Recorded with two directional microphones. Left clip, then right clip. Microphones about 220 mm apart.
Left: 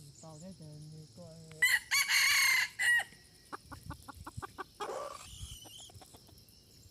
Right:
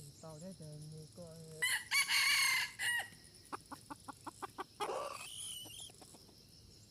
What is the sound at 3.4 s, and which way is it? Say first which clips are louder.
Chicken: left 1 dB; centre (ahead or behind).